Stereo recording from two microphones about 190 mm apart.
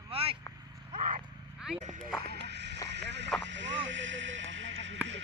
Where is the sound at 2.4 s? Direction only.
65° right (ahead or behind).